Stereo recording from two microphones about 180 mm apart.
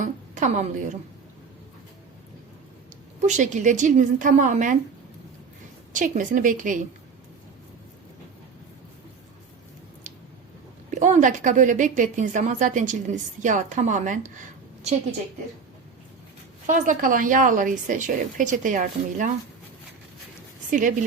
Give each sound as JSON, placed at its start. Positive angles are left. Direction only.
{"t": 0.0, "sound": "a woman's voice", "side_deg": -45}
{"t": 3.2, "sound": "speech", "side_deg": -40}
{"t": 5.9, "sound": "speech", "side_deg": -45}
{"t": 11.0, "sound": "speech", "side_deg": -45}
{"t": 16.6, "sound": "speech", "side_deg": -45}
{"t": 20.7, "sound": "speech", "side_deg": -45}